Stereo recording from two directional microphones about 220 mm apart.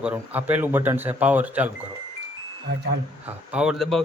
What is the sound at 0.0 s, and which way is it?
Speech, 5° right (ahead or behind).